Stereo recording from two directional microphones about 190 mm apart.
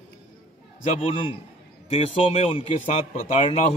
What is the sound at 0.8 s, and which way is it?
A man's voice, 30° left (ahead or behind).